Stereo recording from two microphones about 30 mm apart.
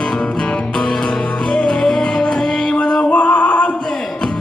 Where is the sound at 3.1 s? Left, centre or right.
Left.